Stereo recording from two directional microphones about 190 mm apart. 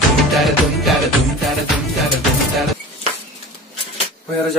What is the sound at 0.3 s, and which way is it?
Music, centre (ahead or behind).